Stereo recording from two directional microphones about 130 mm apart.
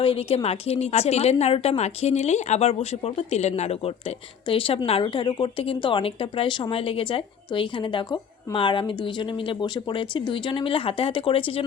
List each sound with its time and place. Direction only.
0.0 s a woman's voice: 45° left (ahead or behind)
4.4 s a woman's voice: 40° left (ahead or behind)